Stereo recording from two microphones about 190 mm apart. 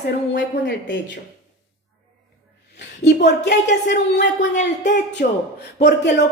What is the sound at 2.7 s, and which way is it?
A woman's voice, 65° left (ahead or behind).